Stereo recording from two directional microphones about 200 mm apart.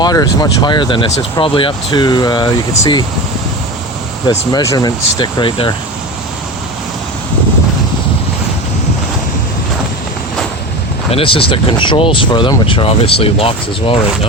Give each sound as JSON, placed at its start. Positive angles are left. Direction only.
{"t": 0.0, "sound": "speech", "side_deg": 20}
{"t": 4.3, "sound": "speech", "side_deg": 15}
{"t": 11.1, "sound": "speech", "side_deg": 25}